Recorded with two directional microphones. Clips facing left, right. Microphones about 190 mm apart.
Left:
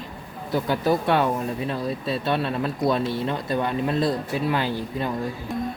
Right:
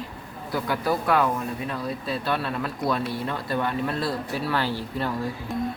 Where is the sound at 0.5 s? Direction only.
25° left (ahead or behind).